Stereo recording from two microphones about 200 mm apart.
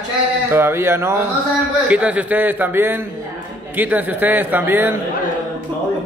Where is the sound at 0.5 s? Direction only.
10° right (ahead or behind).